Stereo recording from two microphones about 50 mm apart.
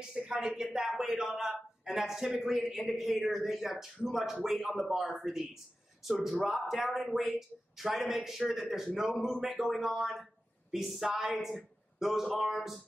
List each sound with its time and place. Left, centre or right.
0.1 s speech: right
0.4 s speech: centre